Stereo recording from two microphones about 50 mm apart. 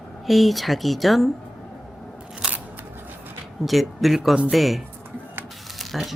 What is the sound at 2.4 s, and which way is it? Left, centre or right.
Scissors, right.